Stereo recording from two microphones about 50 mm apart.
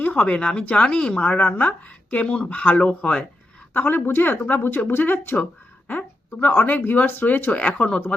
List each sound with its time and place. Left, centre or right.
0.0 s a sound: left
0.3 s a woman's voice: left
1.3 s a woman's voice: left
3.8 s a woman's voice: left